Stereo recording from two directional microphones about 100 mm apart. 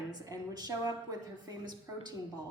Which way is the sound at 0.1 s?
40° right (ahead or behind).